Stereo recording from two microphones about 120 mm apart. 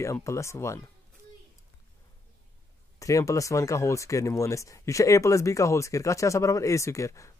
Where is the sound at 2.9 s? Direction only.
30° left (ahead or behind).